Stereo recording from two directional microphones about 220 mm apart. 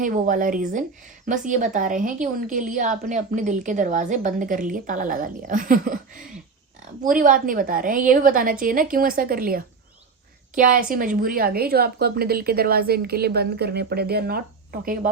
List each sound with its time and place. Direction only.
0.0 s a woman's voice: 35° right (ahead or behind)